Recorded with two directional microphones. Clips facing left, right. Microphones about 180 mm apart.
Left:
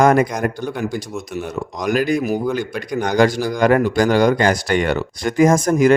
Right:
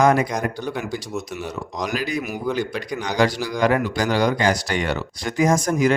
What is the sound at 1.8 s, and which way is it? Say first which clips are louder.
Speech: left 8 dB; 50° left (ahead or behind).